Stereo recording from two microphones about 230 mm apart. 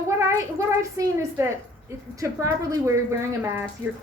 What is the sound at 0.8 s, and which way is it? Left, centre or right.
A woman's voice, centre.